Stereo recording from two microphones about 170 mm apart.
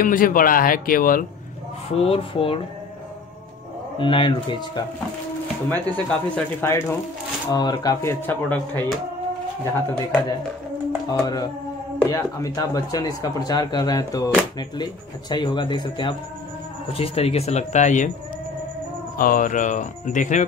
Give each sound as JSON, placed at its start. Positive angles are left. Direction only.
{"t": 0.0, "sound": "speech", "side_deg": 55}
{"t": 1.9, "sound": "speech", "side_deg": 35}
{"t": 4.0, "sound": "speech", "side_deg": 30}
{"t": 5.7, "sound": "speech", "side_deg": 10}
{"t": 11.1, "sound": "speech", "side_deg": 20}
{"t": 19.1, "sound": "speech", "side_deg": 55}